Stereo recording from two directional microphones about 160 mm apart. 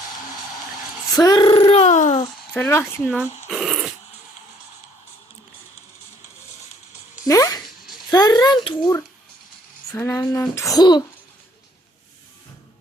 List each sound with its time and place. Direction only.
1.1 s speech: 25° left (ahead or behind); by 2.1 s 45° left (ahead or behind)
2.6 s speech: 15° left (ahead or behind)
3.5 s dog: centre (ahead or behind)
7.3 s a sound: 20° left (ahead or behind)
8.1 s a child's voice: 25° left (ahead or behind)
9.9 s speech: 15° left (ahead or behind)
10.8 s a sound: 25° left (ahead or behind)